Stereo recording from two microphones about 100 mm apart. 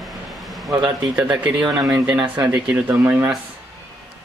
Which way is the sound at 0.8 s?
15° right (ahead or behind).